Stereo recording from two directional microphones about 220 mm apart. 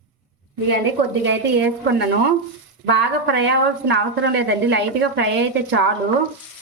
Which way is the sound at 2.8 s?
50° right (ahead or behind).